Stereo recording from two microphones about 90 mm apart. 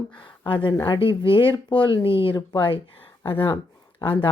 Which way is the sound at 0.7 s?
45° left (ahead or behind).